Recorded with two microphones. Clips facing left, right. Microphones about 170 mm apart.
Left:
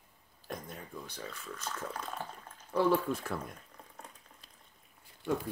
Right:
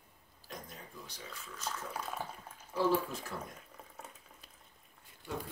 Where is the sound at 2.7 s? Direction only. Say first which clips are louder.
Left 3 dB; 60° left (ahead or behind).